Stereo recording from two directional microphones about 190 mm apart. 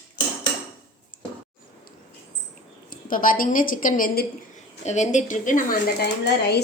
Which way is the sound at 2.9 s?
45° left (ahead or behind).